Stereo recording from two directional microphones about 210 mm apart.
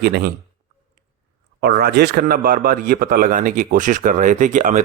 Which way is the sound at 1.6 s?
50° right (ahead or behind).